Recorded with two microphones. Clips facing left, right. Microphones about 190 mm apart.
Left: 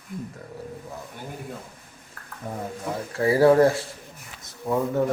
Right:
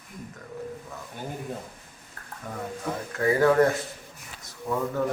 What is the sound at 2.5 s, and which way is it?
A man's voice, 35° left (ahead or behind).